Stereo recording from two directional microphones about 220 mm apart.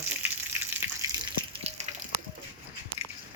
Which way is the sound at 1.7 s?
25° right (ahead or behind).